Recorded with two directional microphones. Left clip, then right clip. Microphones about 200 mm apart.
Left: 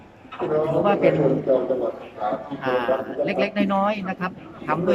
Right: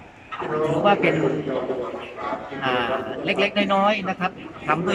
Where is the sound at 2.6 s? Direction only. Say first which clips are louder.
Left 1 dB; 5° left (ahead or behind).